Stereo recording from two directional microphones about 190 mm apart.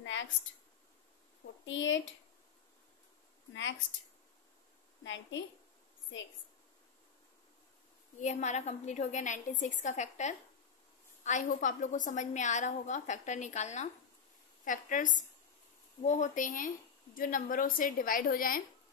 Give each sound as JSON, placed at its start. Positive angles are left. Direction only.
{"t": 0.0, "sound": "a sound", "side_deg": 75}
{"t": 1.6, "sound": "speech", "side_deg": 75}
{"t": 5.0, "sound": "a woman's voice", "side_deg": 80}
{"t": 8.2, "sound": "a woman's voice", "side_deg": 40}